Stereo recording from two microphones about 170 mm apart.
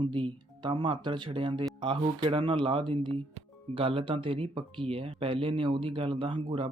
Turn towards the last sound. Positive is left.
turn(degrees=-30)  # may be behind; listen again after turning